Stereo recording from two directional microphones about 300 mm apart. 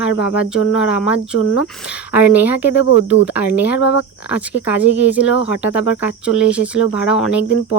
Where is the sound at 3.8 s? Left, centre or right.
Left.